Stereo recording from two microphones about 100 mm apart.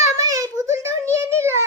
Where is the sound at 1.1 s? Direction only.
25° right (ahead or behind).